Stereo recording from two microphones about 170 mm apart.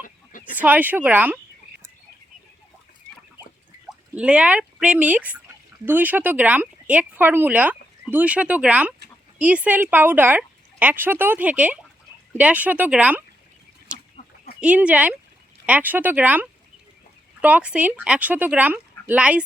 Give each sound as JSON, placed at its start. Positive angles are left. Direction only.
{"t": 0.5, "sound": "speech", "side_deg": -10}
{"t": 4.1, "sound": "speech", "side_deg": -5}
{"t": 14.2, "sound": "a sound", "side_deg": 40}
{"t": 14.6, "sound": "speech", "side_deg": -5}